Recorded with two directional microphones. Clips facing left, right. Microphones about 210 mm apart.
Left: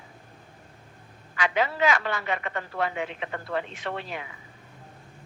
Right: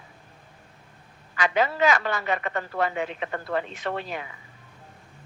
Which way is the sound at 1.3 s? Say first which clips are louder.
Right 2 dB; 40° right (ahead or behind).